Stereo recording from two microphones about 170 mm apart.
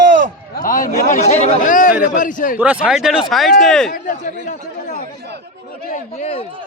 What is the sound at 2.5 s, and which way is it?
Speech, 5° right (ahead or behind).